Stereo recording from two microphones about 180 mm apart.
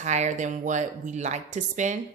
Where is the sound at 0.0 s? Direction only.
40° right (ahead or behind).